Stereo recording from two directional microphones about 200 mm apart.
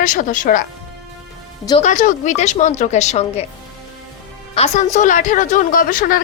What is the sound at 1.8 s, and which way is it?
A woman's voice, 40° left (ahead or behind).